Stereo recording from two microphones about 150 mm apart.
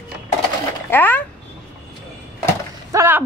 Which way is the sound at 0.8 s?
15° left (ahead or behind).